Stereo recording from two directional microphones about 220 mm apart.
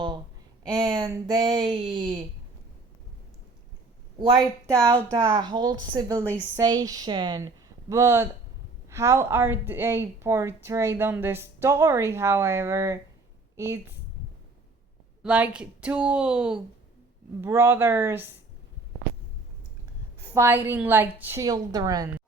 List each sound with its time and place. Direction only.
0.8 s speech: 15° right (ahead or behind)
4.2 s a woman's voice: 20° right (ahead or behind)
15.2 s a woman's voice: 5° right (ahead or behind)
20.3 s a woman's voice: 10° right (ahead or behind)